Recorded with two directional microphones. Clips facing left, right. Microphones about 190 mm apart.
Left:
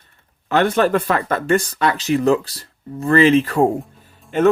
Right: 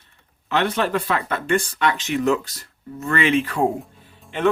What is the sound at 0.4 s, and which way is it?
Speech, 45° left (ahead or behind).